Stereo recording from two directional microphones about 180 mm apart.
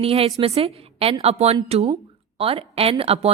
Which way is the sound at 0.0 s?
30° right (ahead or behind).